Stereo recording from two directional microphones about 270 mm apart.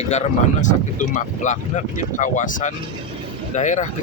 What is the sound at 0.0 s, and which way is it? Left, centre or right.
Speech, left.